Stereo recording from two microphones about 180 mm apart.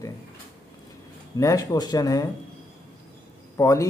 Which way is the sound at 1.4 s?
20° left (ahead or behind).